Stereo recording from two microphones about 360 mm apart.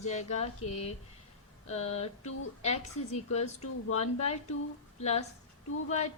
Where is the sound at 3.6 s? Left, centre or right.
Left.